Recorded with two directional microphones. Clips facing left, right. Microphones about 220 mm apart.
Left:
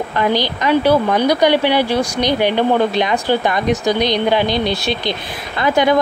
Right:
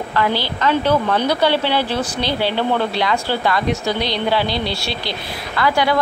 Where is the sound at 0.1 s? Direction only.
15° left (ahead or behind).